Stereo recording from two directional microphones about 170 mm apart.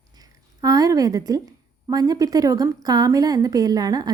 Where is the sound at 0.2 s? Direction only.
20° right (ahead or behind).